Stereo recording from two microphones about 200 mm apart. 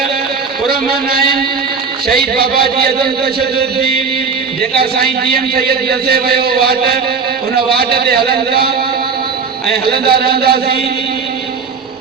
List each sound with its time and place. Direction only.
2.1 s a man's voice: 50° right (ahead or behind)
4.7 s a man's voice: 50° right (ahead or behind)
9.9 s a man's voice: 50° right (ahead or behind)